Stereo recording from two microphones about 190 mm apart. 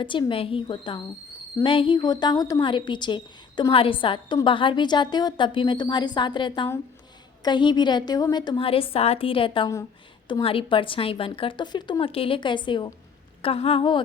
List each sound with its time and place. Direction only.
0.0 s a woman's voice: 25° left (ahead or behind)